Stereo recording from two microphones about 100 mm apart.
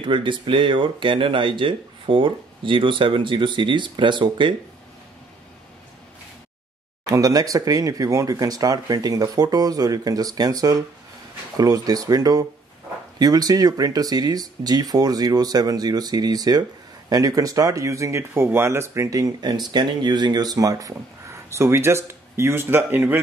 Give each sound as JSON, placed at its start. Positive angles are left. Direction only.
{"t": 0.0, "sound": "speech", "side_deg": -55}
{"t": 7.1, "sound": "speech", "side_deg": -40}